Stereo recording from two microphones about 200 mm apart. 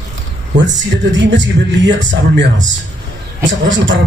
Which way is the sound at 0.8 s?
65° right (ahead or behind).